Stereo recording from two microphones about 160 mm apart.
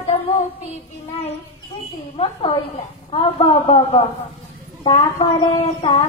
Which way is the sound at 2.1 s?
35° left (ahead or behind).